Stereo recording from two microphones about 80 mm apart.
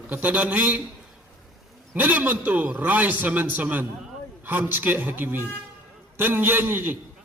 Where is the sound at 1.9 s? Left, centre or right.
Right.